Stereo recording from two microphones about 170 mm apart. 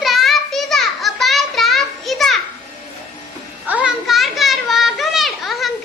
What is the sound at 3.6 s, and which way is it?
Children playing, 5° right (ahead or behind).